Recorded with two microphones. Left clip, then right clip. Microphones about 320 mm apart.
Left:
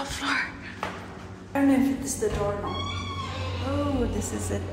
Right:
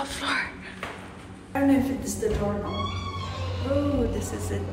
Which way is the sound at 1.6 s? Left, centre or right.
Centre.